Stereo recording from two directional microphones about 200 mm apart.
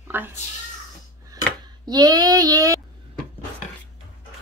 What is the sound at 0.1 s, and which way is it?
Speech, 10° right (ahead or behind).